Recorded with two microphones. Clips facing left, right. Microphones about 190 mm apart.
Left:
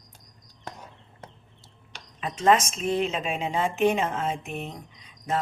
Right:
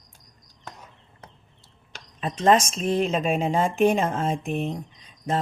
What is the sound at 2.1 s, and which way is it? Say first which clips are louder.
A woman's voice: right 2 dB; 35° right (ahead or behind).